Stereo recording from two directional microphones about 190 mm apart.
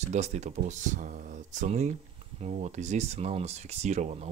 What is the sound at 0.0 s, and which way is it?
Speech, 35° right (ahead or behind).